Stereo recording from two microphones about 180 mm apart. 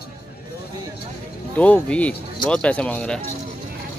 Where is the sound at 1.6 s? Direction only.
10° left (ahead or behind).